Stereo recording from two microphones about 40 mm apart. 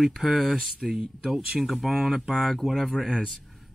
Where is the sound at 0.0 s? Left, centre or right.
Centre.